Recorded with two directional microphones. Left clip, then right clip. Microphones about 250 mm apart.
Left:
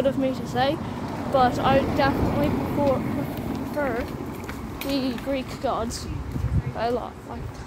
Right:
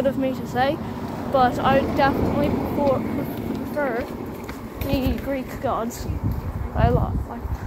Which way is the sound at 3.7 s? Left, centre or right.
Centre.